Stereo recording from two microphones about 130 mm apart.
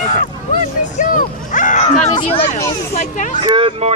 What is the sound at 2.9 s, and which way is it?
Speech, 65° left (ahead or behind).